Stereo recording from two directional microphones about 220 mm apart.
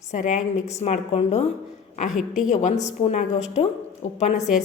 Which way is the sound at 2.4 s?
35° left (ahead or behind).